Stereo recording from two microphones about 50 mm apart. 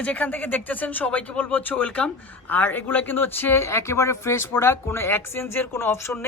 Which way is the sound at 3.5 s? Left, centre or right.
Left.